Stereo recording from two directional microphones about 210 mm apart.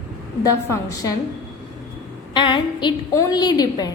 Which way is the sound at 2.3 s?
20° left (ahead or behind).